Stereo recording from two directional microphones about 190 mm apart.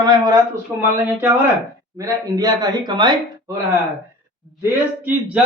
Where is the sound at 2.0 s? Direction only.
20° right (ahead or behind).